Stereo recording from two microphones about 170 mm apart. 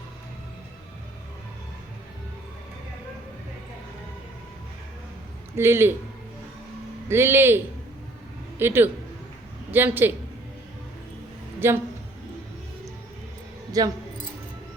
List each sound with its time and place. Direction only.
5.5 s a man's voice: 15° right (ahead or behind)
7.1 s a man's voice: 15° right (ahead or behind)
11.6 s a man's voice: 15° right (ahead or behind)
13.7 s speech: 20° right (ahead or behind)